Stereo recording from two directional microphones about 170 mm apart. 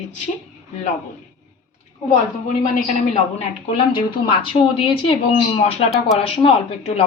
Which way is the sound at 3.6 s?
30° left (ahead or behind).